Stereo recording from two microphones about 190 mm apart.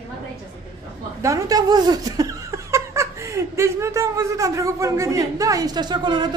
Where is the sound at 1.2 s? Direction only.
15° right (ahead or behind).